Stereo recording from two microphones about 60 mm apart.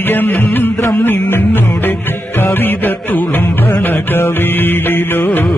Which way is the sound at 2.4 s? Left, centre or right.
Left.